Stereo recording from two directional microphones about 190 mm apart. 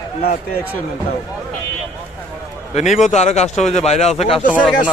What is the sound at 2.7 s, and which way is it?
A man's voice, 35° left (ahead or behind).